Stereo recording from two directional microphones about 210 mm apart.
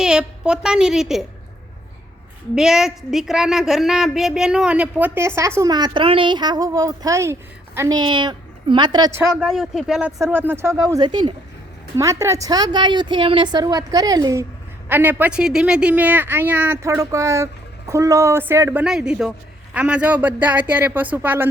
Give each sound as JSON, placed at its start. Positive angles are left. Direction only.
{"t": 0.0, "sound": "a woman's voice", "side_deg": -5}
{"t": 2.6, "sound": "a woman's voice", "side_deg": 0}
{"t": 9.3, "sound": "a woman's voice", "side_deg": 0}